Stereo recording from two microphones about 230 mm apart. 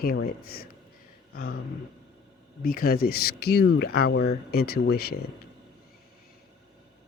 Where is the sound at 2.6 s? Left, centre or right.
Left.